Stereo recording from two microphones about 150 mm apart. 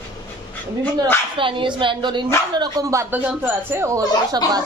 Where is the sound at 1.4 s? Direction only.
35° right (ahead or behind).